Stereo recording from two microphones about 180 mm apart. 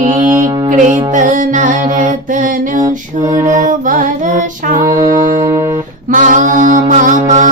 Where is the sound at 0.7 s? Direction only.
45° right (ahead or behind).